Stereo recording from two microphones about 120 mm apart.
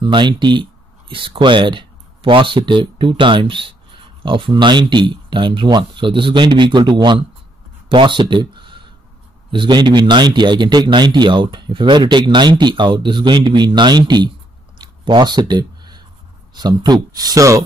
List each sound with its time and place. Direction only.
0.0 s a man's voice: 40° right (ahead or behind)
14.8 s a sound: 35° right (ahead or behind)
16.5 s a man's voice: 35° right (ahead or behind)